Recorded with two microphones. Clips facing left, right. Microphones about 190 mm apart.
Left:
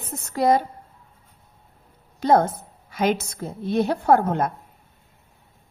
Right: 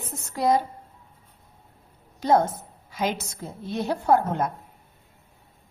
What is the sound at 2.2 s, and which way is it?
A woman's voice, 60° left (ahead or behind).